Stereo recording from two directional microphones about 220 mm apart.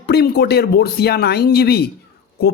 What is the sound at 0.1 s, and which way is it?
Speech, 45° left (ahead or behind).